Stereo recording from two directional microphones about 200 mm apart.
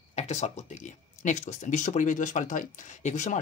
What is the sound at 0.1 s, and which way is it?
Speech, 35° left (ahead or behind).